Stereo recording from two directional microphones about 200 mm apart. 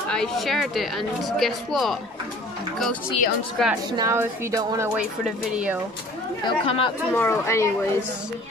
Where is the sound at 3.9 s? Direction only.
15° right (ahead or behind).